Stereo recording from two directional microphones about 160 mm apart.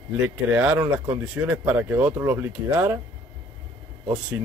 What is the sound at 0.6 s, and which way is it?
Speech, 10° right (ahead or behind).